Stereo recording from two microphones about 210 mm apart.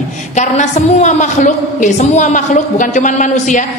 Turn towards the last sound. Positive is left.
turn(degrees=35)  # may be behind; listen again after turning